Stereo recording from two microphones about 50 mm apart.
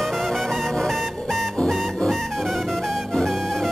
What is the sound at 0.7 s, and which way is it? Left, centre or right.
Music, centre.